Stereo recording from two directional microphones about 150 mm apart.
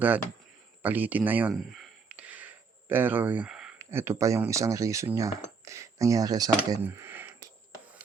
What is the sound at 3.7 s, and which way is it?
Speech, 15° right (ahead or behind).